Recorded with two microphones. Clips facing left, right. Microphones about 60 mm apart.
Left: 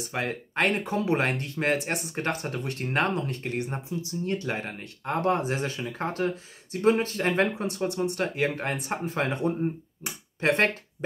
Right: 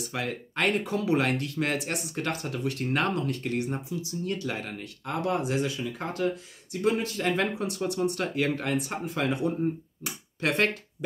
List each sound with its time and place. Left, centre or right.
0.1 s speech: left